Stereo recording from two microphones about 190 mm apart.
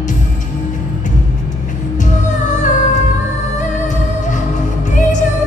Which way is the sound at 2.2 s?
40° left (ahead or behind).